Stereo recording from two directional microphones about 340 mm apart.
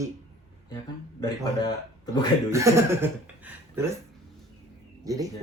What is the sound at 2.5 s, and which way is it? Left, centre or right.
Speech, centre.